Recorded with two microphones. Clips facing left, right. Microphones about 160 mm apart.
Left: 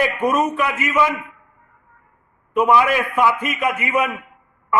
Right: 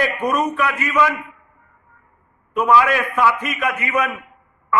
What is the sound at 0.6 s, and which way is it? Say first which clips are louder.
Speech: even; 15° left (ahead or behind).